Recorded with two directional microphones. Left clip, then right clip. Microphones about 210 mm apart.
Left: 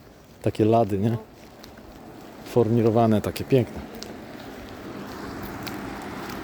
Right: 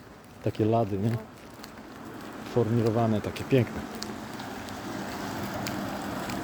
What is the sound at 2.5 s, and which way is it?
Speech, 50° left (ahead or behind).